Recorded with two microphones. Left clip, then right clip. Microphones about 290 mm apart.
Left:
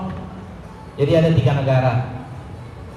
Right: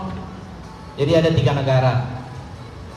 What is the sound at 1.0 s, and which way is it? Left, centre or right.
Speech, right.